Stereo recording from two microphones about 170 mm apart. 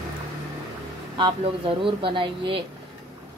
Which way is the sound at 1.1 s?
30° right (ahead or behind).